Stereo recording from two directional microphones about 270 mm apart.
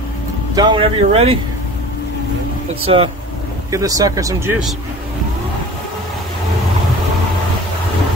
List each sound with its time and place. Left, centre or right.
0.6 s speech: centre
2.8 s speech: centre